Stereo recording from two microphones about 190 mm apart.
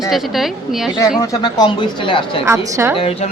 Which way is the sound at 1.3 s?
20° left (ahead or behind).